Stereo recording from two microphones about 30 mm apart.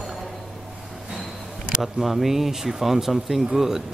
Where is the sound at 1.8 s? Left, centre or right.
Centre.